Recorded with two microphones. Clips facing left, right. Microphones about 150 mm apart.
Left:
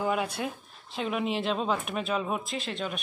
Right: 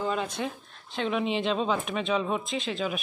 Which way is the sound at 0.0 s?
10° left (ahead or behind).